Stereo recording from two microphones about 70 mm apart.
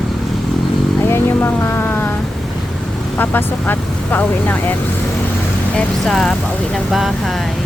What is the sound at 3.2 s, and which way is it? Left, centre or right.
Vehicle, left.